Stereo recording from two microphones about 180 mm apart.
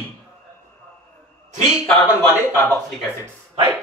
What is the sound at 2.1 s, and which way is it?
A man's voice, 10° left (ahead or behind).